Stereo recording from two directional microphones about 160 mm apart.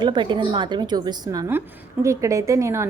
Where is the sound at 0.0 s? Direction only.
30° right (ahead or behind).